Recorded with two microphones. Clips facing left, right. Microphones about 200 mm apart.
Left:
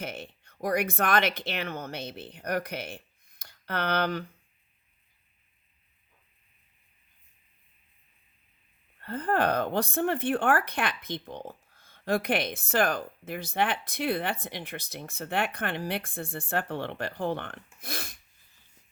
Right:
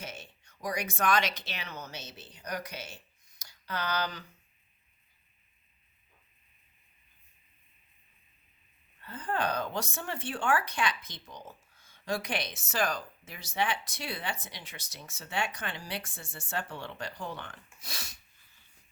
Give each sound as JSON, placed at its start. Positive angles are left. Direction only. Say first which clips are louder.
{"t": 0.0, "sound": "speech", "louder": "left 7 dB", "side_deg": 55}
{"t": 9.0, "sound": "speech", "louder": "left 6 dB", "side_deg": 55}